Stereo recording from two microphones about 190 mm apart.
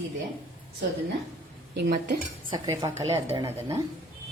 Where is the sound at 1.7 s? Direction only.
55° right (ahead or behind).